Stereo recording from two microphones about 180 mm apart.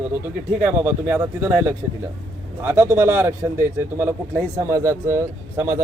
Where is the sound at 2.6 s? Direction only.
15° right (ahead or behind).